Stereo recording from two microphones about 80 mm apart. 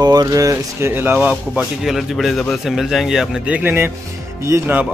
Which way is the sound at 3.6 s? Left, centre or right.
Right.